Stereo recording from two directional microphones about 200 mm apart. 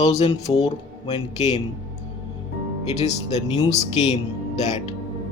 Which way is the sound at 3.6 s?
35° left (ahead or behind).